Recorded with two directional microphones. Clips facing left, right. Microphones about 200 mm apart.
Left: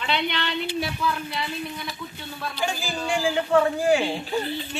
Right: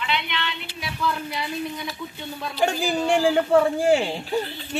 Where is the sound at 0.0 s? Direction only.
35° left (ahead or behind).